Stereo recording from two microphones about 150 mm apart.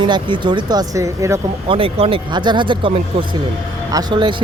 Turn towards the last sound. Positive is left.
turn(degrees=-30)  # may be behind; listen again after turning